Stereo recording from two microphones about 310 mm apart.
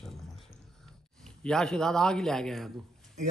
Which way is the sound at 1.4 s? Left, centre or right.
Centre.